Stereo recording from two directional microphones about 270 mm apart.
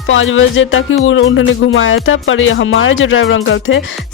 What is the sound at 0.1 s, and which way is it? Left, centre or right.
Speech, left.